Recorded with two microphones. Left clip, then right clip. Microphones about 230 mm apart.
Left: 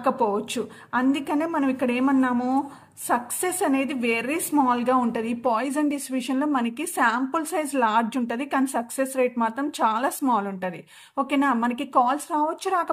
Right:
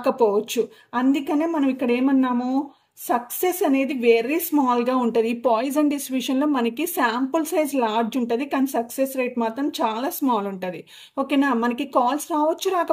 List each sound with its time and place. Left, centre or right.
0.0 s a woman's voice: left
3.6 s a woman's voice: left
5.9 s speech: left
6.2 s a woman's voice: left